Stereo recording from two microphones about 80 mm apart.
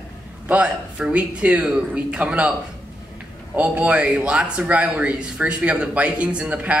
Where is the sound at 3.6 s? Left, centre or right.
Centre.